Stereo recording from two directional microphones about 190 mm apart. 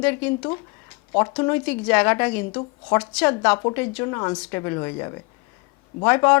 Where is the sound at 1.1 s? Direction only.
20° left (ahead or behind).